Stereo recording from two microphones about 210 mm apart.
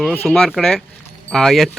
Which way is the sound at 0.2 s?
5° left (ahead or behind).